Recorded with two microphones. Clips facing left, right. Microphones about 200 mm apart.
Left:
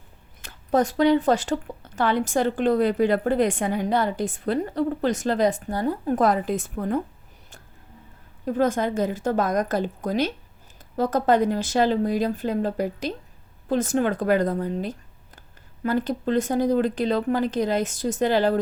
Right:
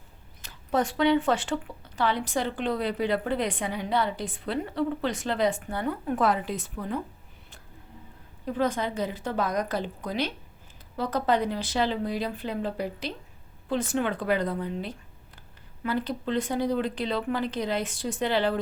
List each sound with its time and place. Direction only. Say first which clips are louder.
0.4 s speech: left 5 dB; 40° left (ahead or behind)
8.4 s speech: left 5 dB; 45° left (ahead or behind)